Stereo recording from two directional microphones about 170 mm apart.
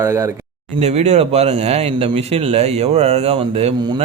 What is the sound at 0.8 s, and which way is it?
Speech, 40° right (ahead or behind).